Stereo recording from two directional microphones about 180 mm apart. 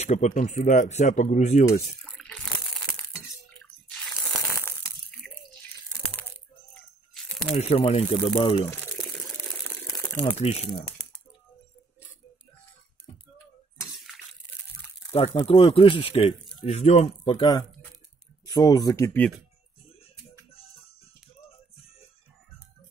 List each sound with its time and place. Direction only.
0.0 s speech: 40° left (ahead or behind)
2.0 s a sound: 5° left (ahead or behind)
4.6 s crushing: 10° left (ahead or behind)
7.2 s crumpling: centre (ahead or behind)
7.5 s speech: 35° left (ahead or behind)
9.0 s a sound: 20° left (ahead or behind)
10.1 s speech: 35° left (ahead or behind)
15.1 s speech: 30° left (ahead or behind)
18.4 s speech: 20° left (ahead or behind)